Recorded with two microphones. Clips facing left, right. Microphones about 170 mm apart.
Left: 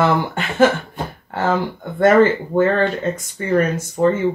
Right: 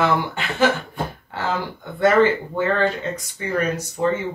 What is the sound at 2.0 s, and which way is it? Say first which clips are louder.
Speech: left 3 dB; 50° left (ahead or behind).